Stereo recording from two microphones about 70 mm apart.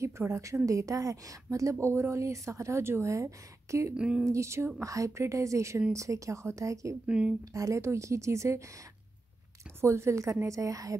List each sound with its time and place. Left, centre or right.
0.3 s speech: right
3.9 s speech: centre
4.3 s speech: right
7.1 s speech: centre
7.5 s speech: right
9.8 s a woman's voice: right